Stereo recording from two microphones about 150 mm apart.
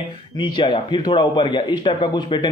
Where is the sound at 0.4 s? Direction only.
35° left (ahead or behind).